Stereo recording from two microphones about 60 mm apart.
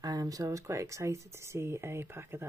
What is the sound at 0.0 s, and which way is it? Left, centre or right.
Speech, right.